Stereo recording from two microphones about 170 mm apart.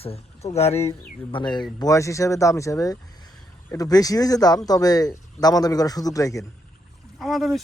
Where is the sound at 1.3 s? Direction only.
25° left (ahead or behind).